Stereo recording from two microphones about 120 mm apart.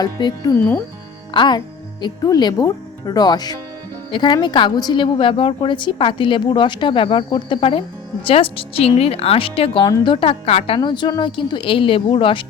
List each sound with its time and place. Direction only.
0.0 s speech: 35° left (ahead or behind)
0.5 s speech: 15° left (ahead or behind)
1.3 s a woman's voice: 40° left (ahead or behind); by 10.8 s 55° left (ahead or behind)
10.8 s a woman's voice: 40° left (ahead or behind)